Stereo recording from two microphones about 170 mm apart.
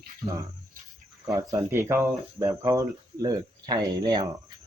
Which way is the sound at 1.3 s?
20° right (ahead or behind).